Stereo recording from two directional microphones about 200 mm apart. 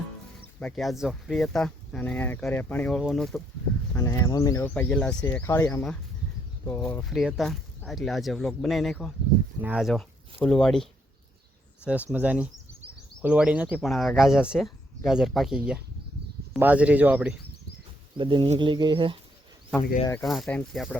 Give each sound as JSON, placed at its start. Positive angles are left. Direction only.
{"t": 0.6, "sound": "speech", "side_deg": 0}
{"t": 3.9, "sound": "speech", "side_deg": 15}
{"t": 12.1, "sound": "speech", "side_deg": -5}
{"t": 18.2, "sound": "speech", "side_deg": -25}
{"t": 20.2, "sound": "speech", "side_deg": 0}